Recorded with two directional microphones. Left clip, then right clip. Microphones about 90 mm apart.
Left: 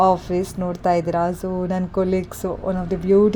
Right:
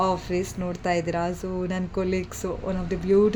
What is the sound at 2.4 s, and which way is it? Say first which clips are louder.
Speech: left 5 dB; 20° left (ahead or behind).